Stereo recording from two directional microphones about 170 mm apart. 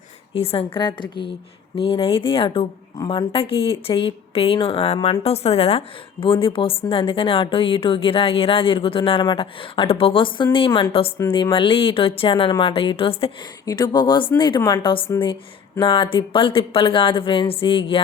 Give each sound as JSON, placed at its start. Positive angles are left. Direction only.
{"t": 0.3, "sound": "a woman's voice", "side_deg": 35}